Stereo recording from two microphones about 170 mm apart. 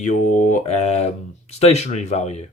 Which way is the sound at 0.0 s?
50° left (ahead or behind).